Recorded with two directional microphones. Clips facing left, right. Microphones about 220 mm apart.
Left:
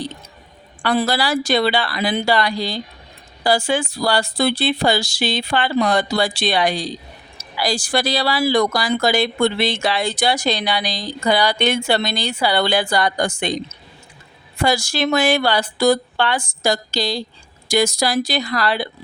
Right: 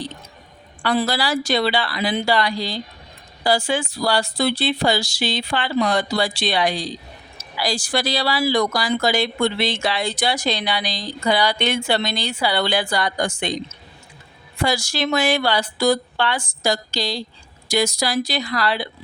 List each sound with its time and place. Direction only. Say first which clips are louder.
0.8 s speech: left 2 dB; 55° left (ahead or behind)
14.6 s speech: left 3 dB; 50° left (ahead or behind)